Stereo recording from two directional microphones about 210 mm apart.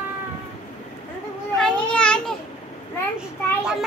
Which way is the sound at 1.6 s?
5° left (ahead or behind).